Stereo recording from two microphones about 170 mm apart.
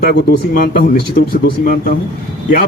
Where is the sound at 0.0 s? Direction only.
70° left (ahead or behind).